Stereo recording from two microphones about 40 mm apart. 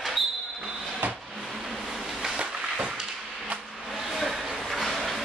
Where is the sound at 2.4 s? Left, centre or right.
Right.